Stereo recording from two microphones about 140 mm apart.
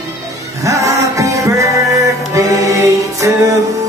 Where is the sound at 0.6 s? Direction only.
20° right (ahead or behind).